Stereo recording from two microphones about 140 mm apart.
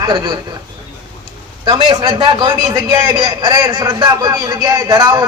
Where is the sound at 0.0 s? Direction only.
30° right (ahead or behind).